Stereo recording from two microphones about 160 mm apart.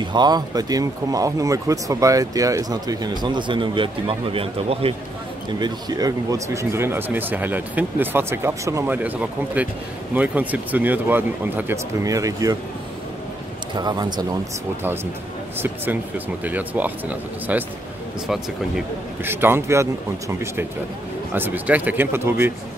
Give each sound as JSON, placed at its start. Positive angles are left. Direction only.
{"t": 0.0, "sound": "speech", "side_deg": -25}
{"t": 5.5, "sound": "speech", "side_deg": -25}
{"t": 13.7, "sound": "speech", "side_deg": -25}
{"t": 15.6, "sound": "speech", "side_deg": -10}
{"t": 19.2, "sound": "speech", "side_deg": -15}